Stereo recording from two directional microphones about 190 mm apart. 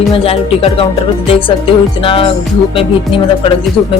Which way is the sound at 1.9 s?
30° left (ahead or behind).